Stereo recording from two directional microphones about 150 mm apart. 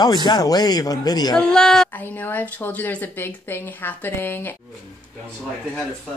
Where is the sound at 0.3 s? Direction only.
25° left (ahead or behind).